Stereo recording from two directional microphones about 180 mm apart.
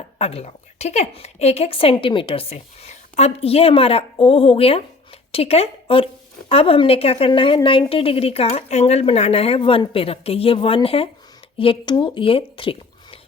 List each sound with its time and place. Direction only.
0.2 s a woman's voice: 35° left (ahead or behind)